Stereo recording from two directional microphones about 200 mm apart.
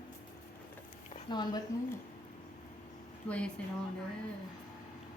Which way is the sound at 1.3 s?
20° left (ahead or behind).